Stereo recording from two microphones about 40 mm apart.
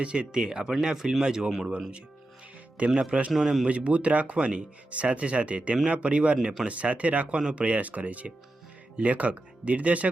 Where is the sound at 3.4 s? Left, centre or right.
Centre.